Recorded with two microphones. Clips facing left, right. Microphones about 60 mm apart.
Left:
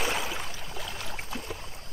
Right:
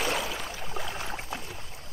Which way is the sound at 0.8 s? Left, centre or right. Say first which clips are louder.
Right 3 dB; right.